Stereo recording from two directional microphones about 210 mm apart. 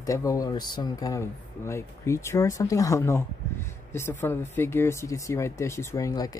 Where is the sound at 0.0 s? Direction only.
15° left (ahead or behind).